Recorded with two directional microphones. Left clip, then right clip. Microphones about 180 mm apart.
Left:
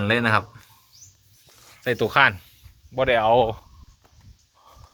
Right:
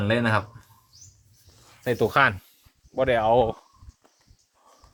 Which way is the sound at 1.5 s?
15° right (ahead or behind).